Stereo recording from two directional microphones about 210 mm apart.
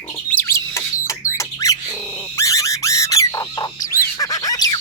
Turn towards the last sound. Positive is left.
turn(degrees=20)  # may be behind; listen again after turning